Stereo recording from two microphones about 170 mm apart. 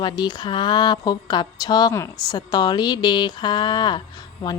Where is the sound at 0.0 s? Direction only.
25° left (ahead or behind).